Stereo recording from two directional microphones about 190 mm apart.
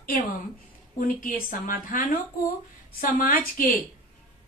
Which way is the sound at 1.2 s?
45° left (ahead or behind).